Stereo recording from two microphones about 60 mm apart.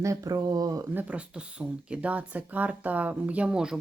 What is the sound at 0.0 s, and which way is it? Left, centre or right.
Speech, right.